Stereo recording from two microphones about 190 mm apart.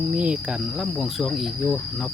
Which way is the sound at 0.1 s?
5° right (ahead or behind).